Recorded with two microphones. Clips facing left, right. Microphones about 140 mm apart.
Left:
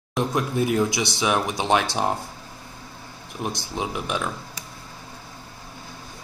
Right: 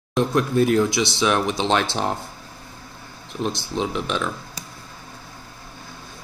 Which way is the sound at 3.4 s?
15° left (ahead or behind).